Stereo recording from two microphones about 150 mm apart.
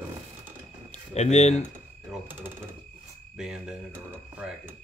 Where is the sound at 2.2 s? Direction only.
15° right (ahead or behind).